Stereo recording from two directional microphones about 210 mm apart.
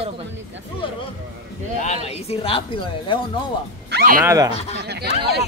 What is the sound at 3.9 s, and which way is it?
Speech, 50° right (ahead or behind).